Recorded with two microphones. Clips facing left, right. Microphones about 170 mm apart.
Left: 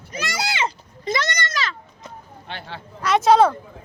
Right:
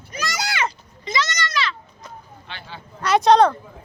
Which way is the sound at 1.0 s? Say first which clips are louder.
Left 1 dB; 55° left (ahead or behind).